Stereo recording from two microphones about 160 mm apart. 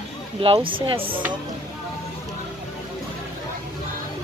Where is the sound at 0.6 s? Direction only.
35° right (ahead or behind).